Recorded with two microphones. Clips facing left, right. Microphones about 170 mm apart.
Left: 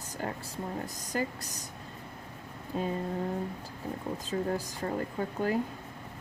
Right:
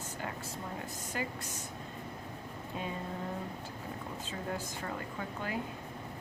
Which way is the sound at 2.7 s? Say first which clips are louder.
Left 7 dB; 40° left (ahead or behind).